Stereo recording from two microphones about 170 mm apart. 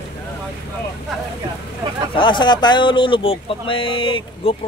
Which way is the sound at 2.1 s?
25° left (ahead or behind).